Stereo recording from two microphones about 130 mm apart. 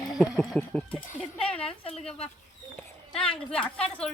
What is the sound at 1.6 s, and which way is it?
Speech, 45° left (ahead or behind).